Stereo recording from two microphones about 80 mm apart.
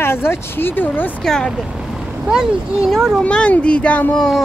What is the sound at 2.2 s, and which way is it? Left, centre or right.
Speech, centre.